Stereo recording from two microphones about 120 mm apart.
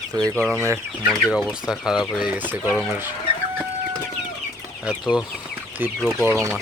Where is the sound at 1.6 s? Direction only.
5° right (ahead or behind).